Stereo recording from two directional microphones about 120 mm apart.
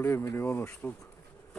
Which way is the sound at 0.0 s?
20° left (ahead or behind).